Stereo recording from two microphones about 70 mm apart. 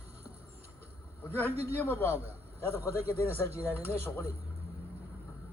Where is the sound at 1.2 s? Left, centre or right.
Left.